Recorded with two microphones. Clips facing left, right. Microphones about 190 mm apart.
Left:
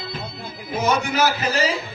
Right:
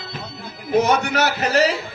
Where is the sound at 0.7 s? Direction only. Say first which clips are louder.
Right 4 dB; 65° right (ahead or behind).